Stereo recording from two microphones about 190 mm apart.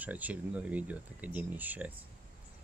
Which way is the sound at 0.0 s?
10° right (ahead or behind).